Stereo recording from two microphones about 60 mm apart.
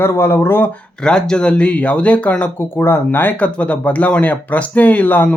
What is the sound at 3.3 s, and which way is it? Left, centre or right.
Speech, left.